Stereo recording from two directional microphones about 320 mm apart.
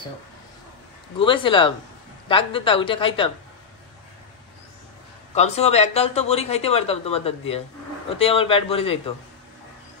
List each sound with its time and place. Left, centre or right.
1.2 s a woman's voice: centre
5.3 s a woman's voice: centre